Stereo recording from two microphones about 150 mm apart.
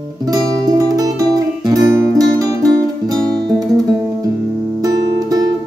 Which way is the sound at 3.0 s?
25° right (ahead or behind).